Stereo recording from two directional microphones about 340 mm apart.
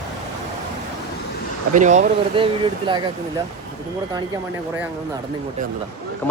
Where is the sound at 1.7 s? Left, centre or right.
Right.